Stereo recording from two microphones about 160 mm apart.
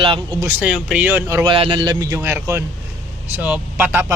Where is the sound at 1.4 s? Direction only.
30° right (ahead or behind).